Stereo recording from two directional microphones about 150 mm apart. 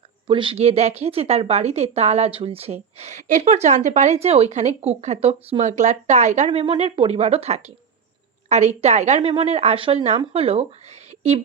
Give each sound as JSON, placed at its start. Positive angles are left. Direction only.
{"t": 0.3, "sound": "a woman's voice", "side_deg": -35}
{"t": 6.5, "sound": "a woman's voice", "side_deg": -35}